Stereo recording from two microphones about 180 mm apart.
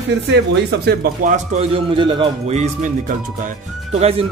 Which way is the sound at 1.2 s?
40° right (ahead or behind).